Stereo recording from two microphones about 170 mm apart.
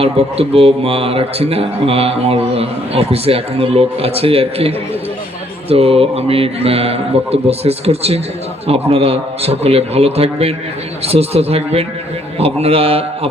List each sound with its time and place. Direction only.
0.0 s a man's voice: 35° right (ahead or behind)